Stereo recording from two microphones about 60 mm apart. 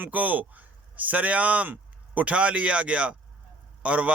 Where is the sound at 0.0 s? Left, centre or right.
Right.